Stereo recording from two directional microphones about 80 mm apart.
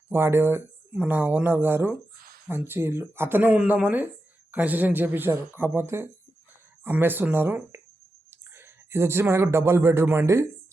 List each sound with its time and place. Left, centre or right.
0.1 s speech: right